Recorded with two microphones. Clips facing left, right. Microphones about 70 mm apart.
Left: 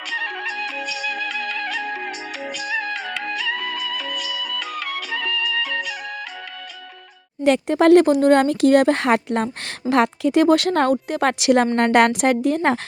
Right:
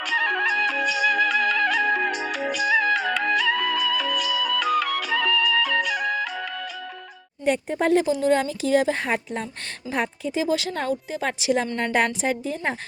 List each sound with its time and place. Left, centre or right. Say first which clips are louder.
0.1 s music: right 5 dB; centre
7.4 s a woman's voice: left 7 dB; left